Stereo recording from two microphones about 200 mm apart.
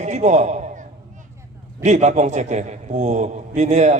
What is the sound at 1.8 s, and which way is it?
A man's voice, 35° right (ahead or behind).